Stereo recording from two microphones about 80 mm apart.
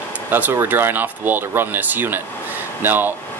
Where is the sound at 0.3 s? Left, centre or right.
Right.